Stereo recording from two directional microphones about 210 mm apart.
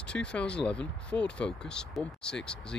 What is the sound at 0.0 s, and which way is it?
Speech, 5° left (ahead or behind).